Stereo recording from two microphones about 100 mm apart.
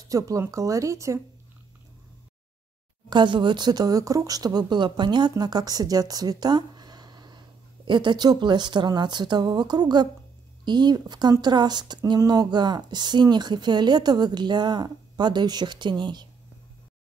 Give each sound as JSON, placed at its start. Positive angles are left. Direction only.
{"t": 0.1, "sound": "speech", "side_deg": -35}
{"t": 3.1, "sound": "speech", "side_deg": -50}